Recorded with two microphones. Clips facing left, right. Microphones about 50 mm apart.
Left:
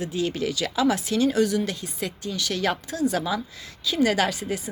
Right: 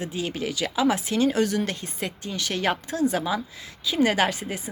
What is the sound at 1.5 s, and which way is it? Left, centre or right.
A woman's voice, right.